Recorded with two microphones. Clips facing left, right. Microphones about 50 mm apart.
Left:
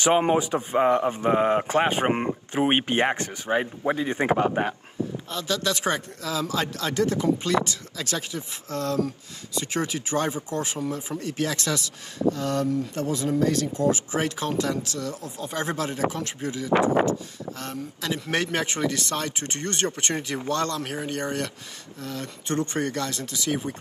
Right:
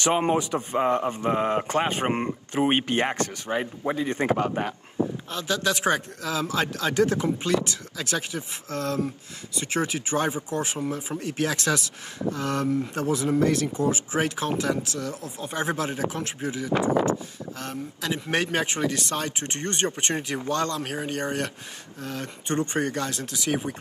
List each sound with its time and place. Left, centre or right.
0.0 s a man's voice: centre
0.4 s speech: left
0.7 s speech: centre
1.7 s speech: left
2.0 s a man's voice: centre
2.5 s speech: left
5.0 s a sound: right
5.3 s speech: right
16.7 s speech: left
17.0 s speech: right